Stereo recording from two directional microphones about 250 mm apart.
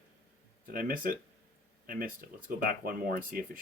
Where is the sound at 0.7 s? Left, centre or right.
Right.